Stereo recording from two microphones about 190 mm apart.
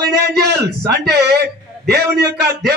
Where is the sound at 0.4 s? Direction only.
60° right (ahead or behind).